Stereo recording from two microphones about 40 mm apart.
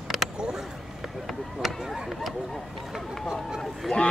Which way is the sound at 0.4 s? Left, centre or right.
Right.